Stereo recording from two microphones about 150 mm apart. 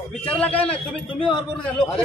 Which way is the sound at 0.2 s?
10° left (ahead or behind).